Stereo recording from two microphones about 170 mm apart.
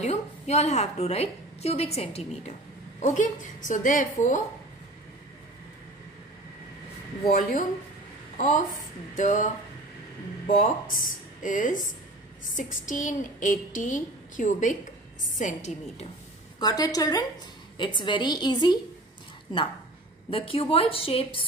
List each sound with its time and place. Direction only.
0.0 s a woman's voice: 40° left (ahead or behind)
3.0 s a woman's voice: 50° left (ahead or behind)
7.2 s a woman's voice: 50° left (ahead or behind)
16.5 s a woman's voice: 20° left (ahead or behind)
20.2 s a woman's voice: 35° left (ahead or behind)